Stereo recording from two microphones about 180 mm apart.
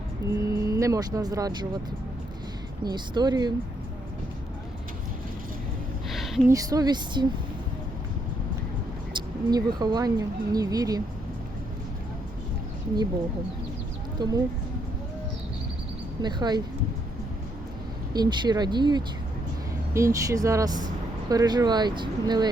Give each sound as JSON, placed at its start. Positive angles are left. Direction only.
{"t": 0.3, "sound": "speech", "side_deg": -15}
{"t": 2.8, "sound": "speech", "side_deg": -25}
{"t": 6.1, "sound": "a sound", "side_deg": 0}
{"t": 6.5, "sound": "speech", "side_deg": -20}
{"t": 9.1, "sound": "speech", "side_deg": -25}
{"t": 14.2, "sound": "speech", "side_deg": -20}
{"t": 16.2, "sound": "speech", "side_deg": -25}
{"t": 18.1, "sound": "speech", "side_deg": -20}